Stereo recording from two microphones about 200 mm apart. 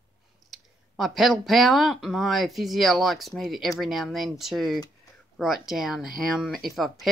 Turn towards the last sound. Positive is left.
turn(degrees=0)  # may be behind; listen again after turning